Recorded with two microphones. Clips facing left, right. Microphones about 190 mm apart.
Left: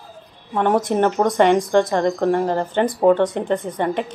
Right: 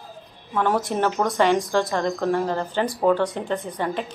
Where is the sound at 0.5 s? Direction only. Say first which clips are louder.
Left 4 dB; 20° left (ahead or behind).